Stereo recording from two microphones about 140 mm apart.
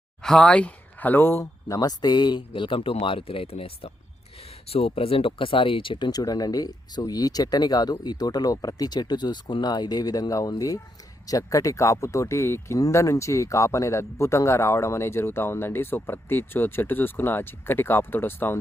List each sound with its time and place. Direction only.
0.2 s speech: 5° left (ahead or behind)